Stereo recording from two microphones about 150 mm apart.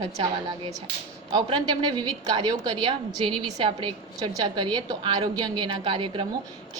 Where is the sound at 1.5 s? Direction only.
30° right (ahead or behind).